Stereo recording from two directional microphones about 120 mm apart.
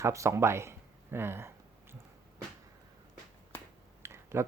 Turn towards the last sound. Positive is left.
turn(degrees=-20)  # may be behind; listen again after turning